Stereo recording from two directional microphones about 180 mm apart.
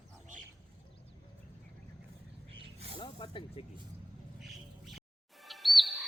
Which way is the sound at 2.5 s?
30° right (ahead or behind).